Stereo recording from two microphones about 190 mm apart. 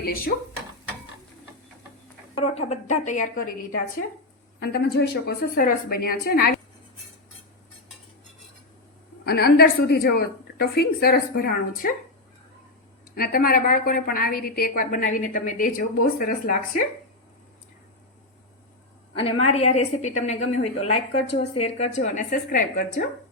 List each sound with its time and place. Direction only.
2.4 s a woman's voice: 35° left (ahead or behind)
4.6 s a woman's voice: 60° left (ahead or behind)
9.2 s a woman's voice: 55° left (ahead or behind)
13.1 s a woman's voice: 50° left (ahead or behind)
19.1 s a woman's voice: 30° left (ahead or behind)